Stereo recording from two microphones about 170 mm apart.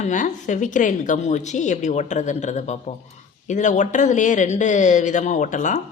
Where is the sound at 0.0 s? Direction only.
45° left (ahead or behind).